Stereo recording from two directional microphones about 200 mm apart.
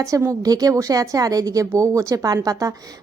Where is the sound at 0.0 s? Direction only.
15° right (ahead or behind).